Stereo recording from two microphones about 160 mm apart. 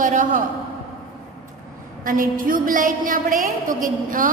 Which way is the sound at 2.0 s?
60° right (ahead or behind).